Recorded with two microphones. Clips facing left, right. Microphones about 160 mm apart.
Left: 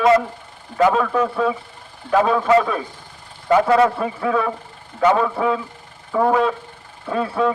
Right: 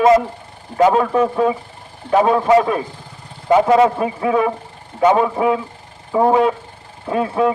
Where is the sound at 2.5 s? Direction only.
15° right (ahead or behind).